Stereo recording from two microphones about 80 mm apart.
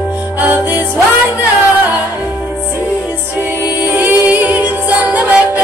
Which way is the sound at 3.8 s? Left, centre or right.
Right.